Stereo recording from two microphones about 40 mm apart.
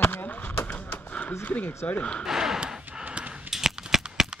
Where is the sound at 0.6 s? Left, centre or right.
Left.